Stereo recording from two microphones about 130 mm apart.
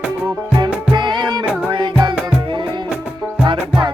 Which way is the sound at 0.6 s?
35° right (ahead or behind).